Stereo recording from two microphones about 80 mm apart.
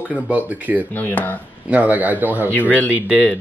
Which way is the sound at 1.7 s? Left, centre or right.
Centre.